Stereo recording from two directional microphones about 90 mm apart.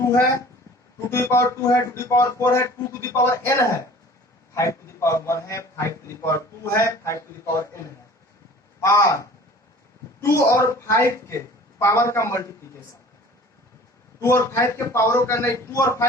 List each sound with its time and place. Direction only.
0.0 s a woman's voice: 35° left (ahead or behind)
8.8 s a woman's voice: 35° left (ahead or behind)
14.2 s a woman's voice: 30° left (ahead or behind)